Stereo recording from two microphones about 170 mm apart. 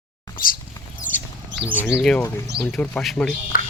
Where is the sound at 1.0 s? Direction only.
50° left (ahead or behind).